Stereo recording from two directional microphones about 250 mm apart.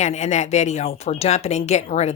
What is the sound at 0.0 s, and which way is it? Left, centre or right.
Speech, left.